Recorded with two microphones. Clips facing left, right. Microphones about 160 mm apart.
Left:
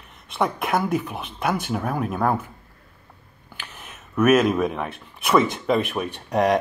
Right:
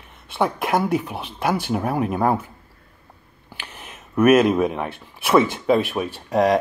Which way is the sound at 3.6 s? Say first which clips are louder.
Right 2 dB; 10° right (ahead or behind).